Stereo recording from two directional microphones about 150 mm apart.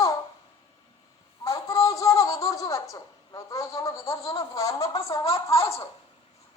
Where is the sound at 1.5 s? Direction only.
20° left (ahead or behind).